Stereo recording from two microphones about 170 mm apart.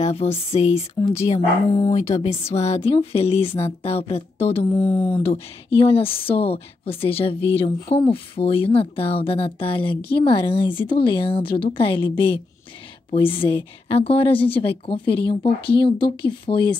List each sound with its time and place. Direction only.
0.0 s speech: 35° left (ahead or behind)
1.9 s speech: 40° left (ahead or behind)
4.7 s speech: 15° left (ahead or behind)
5.2 s speech: 35° left (ahead or behind)